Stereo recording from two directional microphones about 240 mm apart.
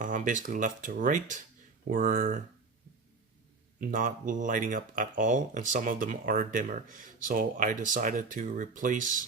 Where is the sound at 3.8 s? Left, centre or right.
Right.